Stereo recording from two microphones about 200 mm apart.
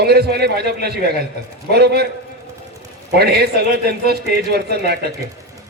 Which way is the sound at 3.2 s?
55° right (ahead or behind).